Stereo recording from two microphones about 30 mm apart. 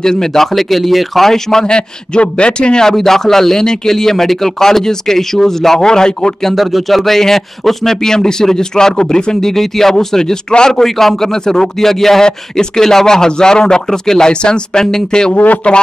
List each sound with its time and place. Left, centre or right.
0.0 s speech: centre
0.5 s speech: centre
1.3 s speech: centre
1.7 s speech: left
2.8 s speech: centre
5.9 s speech: left
6.5 s speech: centre; by 9.5 s left
9.5 s speech: centre
12.3 s speech: left
14.3 s speech: left
15.3 s speech: left